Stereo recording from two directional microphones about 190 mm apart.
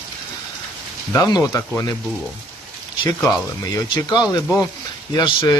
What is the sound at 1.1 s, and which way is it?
Speech, 15° left (ahead or behind).